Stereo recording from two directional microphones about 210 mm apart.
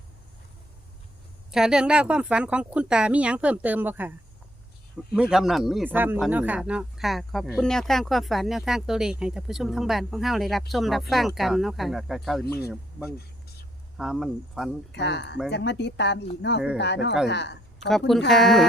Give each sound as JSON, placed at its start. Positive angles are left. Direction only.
{"t": 1.5, "sound": "speech", "side_deg": -5}
{"t": 5.1, "sound": "speech", "side_deg": -5}
{"t": 13.9, "sound": "speech", "side_deg": 0}
{"t": 14.9, "sound": "speech", "side_deg": 55}
{"t": 18.3, "sound": "speech", "side_deg": 0}